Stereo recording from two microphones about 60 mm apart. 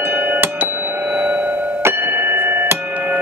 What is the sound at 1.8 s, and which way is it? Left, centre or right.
Music, right.